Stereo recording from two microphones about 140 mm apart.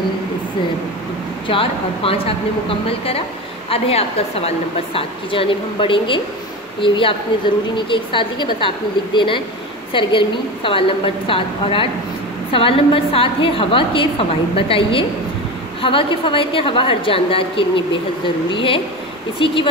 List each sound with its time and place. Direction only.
1.5 s a woman's voice: 40° left (ahead or behind)
3.7 s a woman's voice: 45° left (ahead or behind)